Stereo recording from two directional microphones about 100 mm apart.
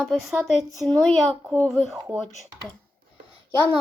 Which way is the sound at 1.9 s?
30° right (ahead or behind).